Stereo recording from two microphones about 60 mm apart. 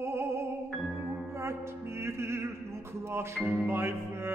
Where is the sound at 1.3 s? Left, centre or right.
Right.